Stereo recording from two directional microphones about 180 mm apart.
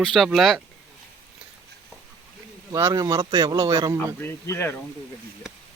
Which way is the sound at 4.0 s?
10° left (ahead or behind).